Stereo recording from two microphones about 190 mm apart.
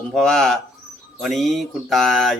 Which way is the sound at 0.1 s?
5° left (ahead or behind).